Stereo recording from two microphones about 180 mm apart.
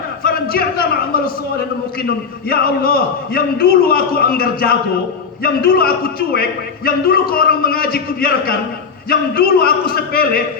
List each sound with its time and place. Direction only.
0.2 s a man's voice: 55° left (ahead or behind)
2.5 s a man's voice: 55° left (ahead or behind)